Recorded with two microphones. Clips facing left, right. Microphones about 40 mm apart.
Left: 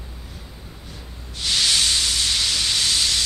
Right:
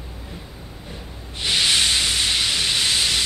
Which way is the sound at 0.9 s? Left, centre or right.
Right.